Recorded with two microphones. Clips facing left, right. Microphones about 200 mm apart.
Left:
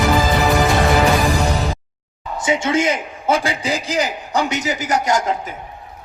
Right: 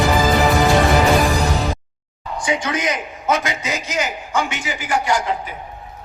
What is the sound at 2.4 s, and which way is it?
A man's voice, 25° left (ahead or behind).